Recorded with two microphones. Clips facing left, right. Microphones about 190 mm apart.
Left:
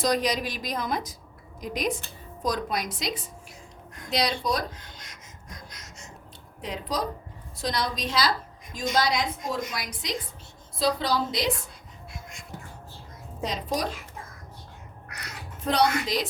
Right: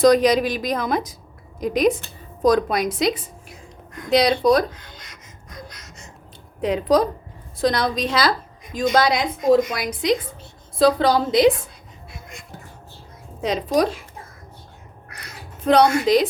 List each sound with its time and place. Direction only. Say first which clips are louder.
0.0 s a woman's voice: right 11 dB; 65° right (ahead or behind)
6.6 s a woman's voice: right 12 dB; 60° right (ahead or behind)
13.4 s a woman's voice: right 9 dB; 65° right (ahead or behind)
15.6 s a woman's voice: right 8 dB; 55° right (ahead or behind)